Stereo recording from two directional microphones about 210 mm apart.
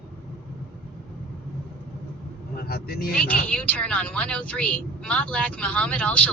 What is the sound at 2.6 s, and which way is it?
Speech, 45° left (ahead or behind).